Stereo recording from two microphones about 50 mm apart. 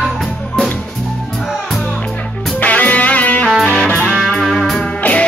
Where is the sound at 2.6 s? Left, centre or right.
Left.